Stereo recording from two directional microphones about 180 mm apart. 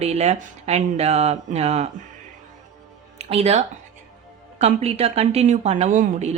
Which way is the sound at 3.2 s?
35° right (ahead or behind).